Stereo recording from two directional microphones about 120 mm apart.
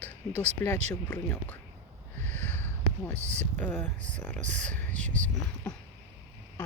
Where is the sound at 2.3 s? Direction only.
15° left (ahead or behind).